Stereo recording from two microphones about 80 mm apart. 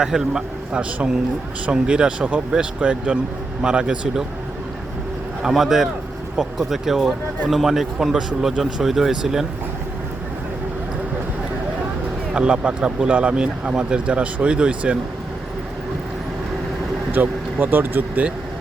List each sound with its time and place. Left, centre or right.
0.0 s speech: centre
5.4 s speech: centre
12.3 s speech: centre
17.2 s speech: right